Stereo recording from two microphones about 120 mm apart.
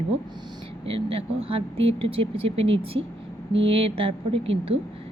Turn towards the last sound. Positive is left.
turn(degrees=-55)  # may be behind; listen again after turning